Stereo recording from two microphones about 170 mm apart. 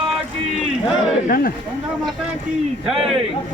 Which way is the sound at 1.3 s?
60° left (ahead or behind).